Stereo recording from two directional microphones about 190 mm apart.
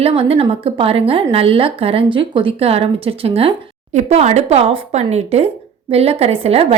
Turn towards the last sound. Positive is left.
turn(degrees=-30)  # may be behind; listen again after turning